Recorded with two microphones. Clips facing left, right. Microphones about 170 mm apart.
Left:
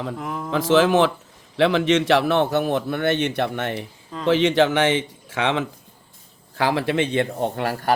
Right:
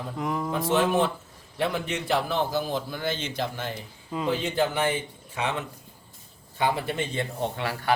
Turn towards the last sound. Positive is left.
turn(degrees=45)  # may be behind; listen again after turning